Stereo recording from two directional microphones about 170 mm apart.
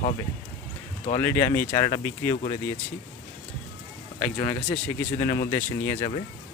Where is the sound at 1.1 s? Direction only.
15° left (ahead or behind).